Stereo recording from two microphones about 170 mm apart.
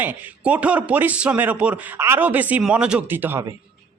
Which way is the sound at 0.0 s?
10° right (ahead or behind).